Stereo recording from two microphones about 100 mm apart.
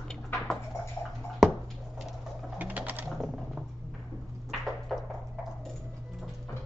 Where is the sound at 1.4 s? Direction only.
Centre (ahead or behind).